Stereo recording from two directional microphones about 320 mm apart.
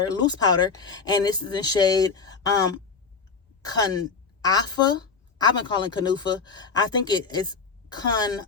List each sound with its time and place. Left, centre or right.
0.1 s a woman's voice: centre